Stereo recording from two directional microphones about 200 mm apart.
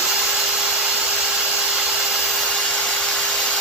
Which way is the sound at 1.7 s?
5° right (ahead or behind).